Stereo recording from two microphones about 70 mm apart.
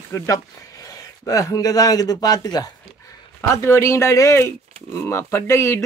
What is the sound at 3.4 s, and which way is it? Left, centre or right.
Speech, left.